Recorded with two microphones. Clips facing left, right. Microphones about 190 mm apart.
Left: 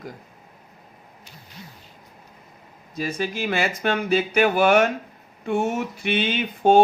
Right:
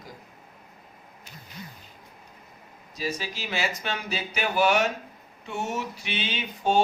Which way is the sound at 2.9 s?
55° left (ahead or behind).